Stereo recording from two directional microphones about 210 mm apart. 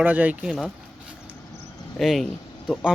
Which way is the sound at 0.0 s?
10° right (ahead or behind).